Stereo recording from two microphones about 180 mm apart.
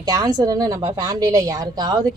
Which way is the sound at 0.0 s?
20° right (ahead or behind).